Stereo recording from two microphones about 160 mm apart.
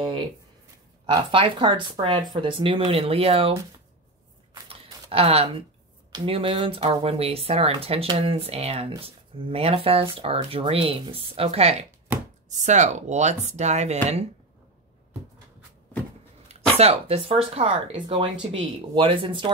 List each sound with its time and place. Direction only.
1.1 s speech: 30° right (ahead or behind)
4.6 s a sound: 35° right (ahead or behind)
6.1 s speech: 35° right (ahead or behind)
12.1 s chopping: 10° right (ahead or behind)
12.4 s speech: 50° right (ahead or behind)
16.7 s speech: 40° right (ahead or behind)